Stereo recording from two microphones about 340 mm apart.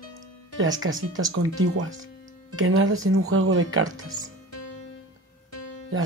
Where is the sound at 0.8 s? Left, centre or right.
Right.